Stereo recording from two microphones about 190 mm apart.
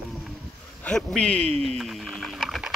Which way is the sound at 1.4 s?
35° right (ahead or behind).